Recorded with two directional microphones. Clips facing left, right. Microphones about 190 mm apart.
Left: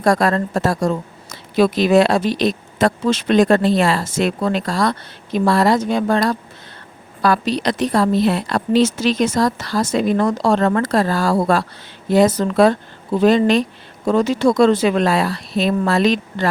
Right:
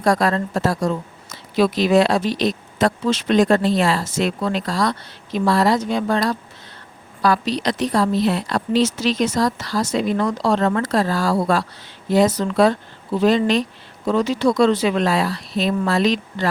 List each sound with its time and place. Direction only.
0.0 s a woman's voice: 50° left (ahead or behind)